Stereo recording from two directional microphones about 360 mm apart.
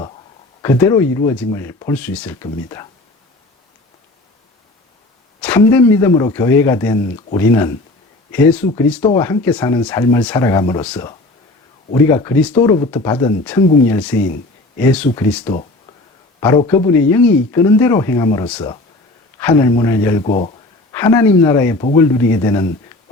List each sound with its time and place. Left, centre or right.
0.6 s speech: centre
5.4 s speech: centre
20.2 s speech: centre
20.9 s speech: centre